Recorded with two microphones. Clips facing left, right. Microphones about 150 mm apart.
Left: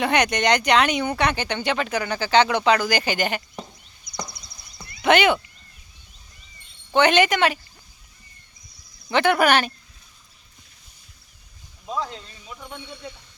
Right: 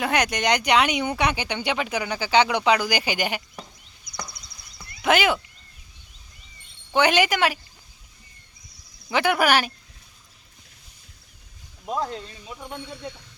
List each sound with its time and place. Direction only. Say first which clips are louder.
0.0 s speech: left 3 dB; 5° right (ahead or behind)
5.0 s speech: left 3 dB; 5° right (ahead or behind)
6.9 s speech: left 2 dB; 10° right (ahead or behind)
9.0 s speech: left 2 dB; 5° right (ahead or behind)
12.5 s speech: right 1 dB; 30° right (ahead or behind)